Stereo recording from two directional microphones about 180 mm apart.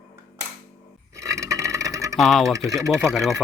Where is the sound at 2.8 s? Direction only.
15° right (ahead or behind).